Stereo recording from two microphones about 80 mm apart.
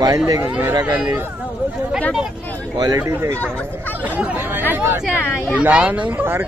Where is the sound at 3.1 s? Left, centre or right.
Right.